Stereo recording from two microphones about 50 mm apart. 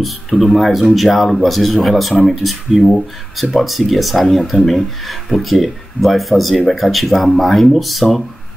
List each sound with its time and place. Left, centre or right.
0.0 s speech: centre